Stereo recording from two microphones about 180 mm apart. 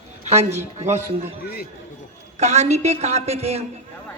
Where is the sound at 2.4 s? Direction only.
40° right (ahead or behind).